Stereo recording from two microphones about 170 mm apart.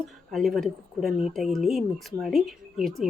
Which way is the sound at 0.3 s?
Centre (ahead or behind).